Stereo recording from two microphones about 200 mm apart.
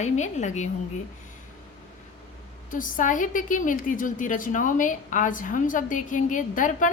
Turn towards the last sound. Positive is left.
turn(degrees=40)  # may be behind; listen again after turning